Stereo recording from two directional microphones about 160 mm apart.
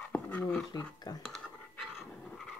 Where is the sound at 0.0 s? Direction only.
10° left (ahead or behind).